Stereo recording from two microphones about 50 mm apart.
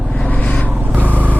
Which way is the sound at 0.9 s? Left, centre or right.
Right.